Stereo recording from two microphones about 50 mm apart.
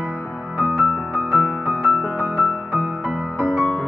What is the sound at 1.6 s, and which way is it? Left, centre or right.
Music, right.